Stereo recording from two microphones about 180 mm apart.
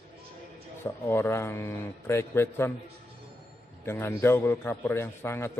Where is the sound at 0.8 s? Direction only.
10° left (ahead or behind).